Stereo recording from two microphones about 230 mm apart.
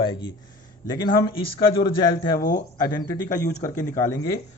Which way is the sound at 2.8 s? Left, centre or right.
Centre.